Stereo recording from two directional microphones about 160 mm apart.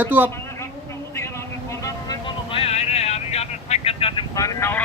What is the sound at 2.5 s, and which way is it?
Vehicle, 40° left (ahead or behind).